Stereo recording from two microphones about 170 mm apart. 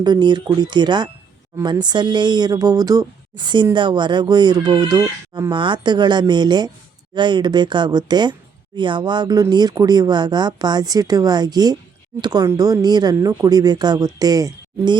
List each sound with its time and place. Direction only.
0.0 s speech: 25° right (ahead or behind)